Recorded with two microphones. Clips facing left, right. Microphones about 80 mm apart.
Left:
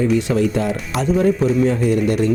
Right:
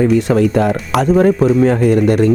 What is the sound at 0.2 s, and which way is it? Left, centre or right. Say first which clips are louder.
Speech: right 5 dB; right.